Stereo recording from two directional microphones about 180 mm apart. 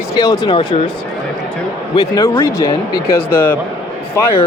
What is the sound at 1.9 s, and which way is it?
Speech, 20° left (ahead or behind).